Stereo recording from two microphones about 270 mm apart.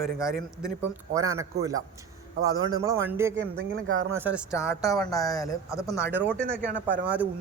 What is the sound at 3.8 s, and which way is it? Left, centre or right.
Speech, right.